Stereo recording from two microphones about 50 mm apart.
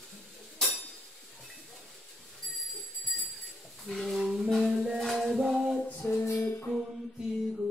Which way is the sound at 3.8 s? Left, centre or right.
Centre.